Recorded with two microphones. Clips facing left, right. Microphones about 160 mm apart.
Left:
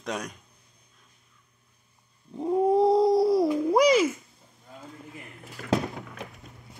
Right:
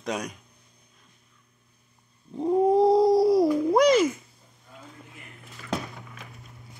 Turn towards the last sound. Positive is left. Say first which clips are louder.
# left 7 dB
turn(degrees=55)  # may be behind; listen again after turning